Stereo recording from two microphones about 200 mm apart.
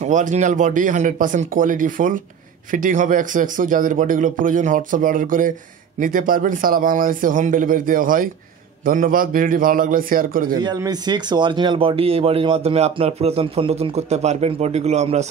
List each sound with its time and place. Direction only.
0.0 s a man's voice: 40° right (ahead or behind)
10.5 s speech: 20° right (ahead or behind)